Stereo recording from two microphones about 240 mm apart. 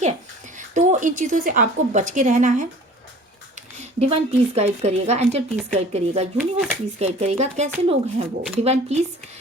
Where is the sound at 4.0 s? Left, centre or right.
Right.